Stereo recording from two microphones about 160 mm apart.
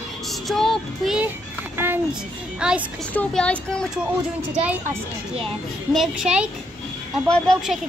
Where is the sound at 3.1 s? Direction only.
10° left (ahead or behind).